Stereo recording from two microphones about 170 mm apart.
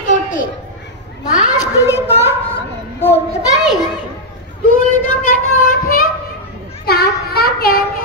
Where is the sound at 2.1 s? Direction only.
35° left (ahead or behind).